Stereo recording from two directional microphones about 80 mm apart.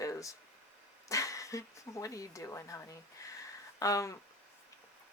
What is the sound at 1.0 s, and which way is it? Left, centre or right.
Speech, left.